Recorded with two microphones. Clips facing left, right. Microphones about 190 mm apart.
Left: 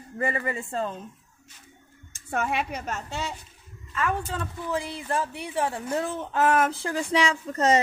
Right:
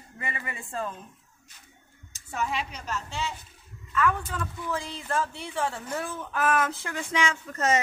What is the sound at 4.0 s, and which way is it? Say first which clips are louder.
Speech: right 1 dB; 30° left (ahead or behind).